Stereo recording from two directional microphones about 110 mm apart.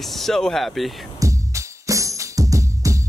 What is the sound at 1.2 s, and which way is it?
Music, 30° right (ahead or behind).